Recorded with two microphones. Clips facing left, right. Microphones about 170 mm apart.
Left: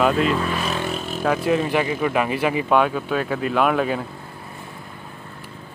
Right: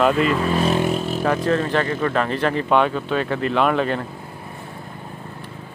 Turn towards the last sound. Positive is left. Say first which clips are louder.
# even
turn(degrees=5)  # may be behind; listen again after turning